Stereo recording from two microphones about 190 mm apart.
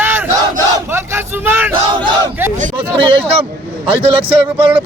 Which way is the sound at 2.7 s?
30° right (ahead or behind).